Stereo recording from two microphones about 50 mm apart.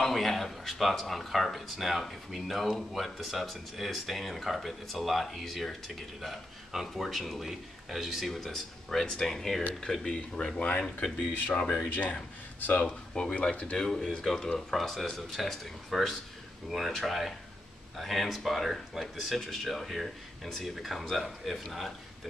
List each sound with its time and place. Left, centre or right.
0.0 s speech: centre
10.0 s speech: centre
12.0 s speech: left
12.8 s speech: centre
13.7 s speech: centre